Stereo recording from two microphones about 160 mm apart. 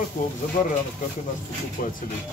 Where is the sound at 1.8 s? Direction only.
60° left (ahead or behind).